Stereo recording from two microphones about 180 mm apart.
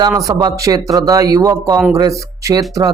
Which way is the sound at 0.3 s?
20° right (ahead or behind).